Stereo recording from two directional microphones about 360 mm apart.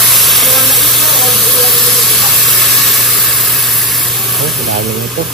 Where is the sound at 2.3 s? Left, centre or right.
Centre.